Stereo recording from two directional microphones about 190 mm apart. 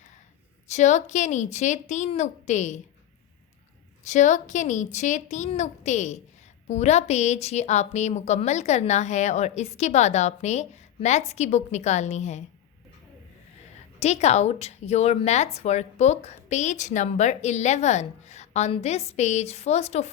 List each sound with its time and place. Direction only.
0.7 s a woman's voice: 40° left (ahead or behind)
4.0 s a woman's voice: 40° left (ahead or behind)
14.0 s a woman's voice: 35° left (ahead or behind)